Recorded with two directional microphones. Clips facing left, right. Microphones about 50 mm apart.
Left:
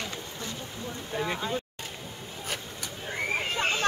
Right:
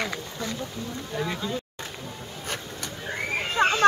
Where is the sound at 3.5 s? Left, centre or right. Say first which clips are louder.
Right 10 dB; right.